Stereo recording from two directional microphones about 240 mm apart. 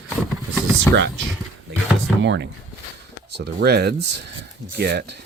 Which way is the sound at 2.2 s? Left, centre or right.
Right.